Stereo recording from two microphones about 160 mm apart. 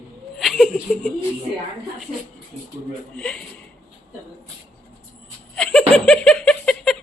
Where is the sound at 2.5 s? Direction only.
45° right (ahead or behind).